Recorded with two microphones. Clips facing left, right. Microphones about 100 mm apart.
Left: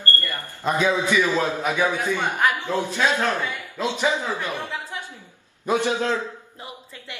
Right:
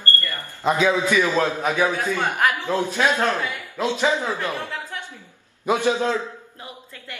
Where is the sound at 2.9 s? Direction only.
15° right (ahead or behind).